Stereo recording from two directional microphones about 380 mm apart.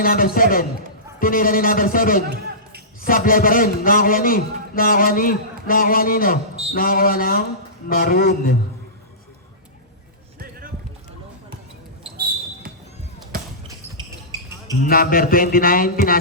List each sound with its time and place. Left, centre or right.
0.0 s a man's voice: left
2.3 s a sound: right
3.1 s a man's voice: left
12.1 s basketball bounce: right
14.8 s a man's voice: left